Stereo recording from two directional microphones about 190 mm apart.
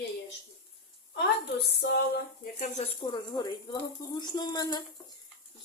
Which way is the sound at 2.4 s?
40° left (ahead or behind).